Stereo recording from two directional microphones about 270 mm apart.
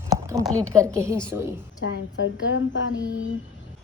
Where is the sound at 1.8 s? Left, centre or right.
Left.